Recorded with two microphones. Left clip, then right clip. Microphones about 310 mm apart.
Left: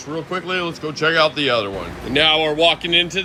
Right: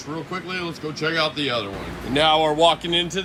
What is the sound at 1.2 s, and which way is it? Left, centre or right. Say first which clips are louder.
Speech: left 6 dB; right.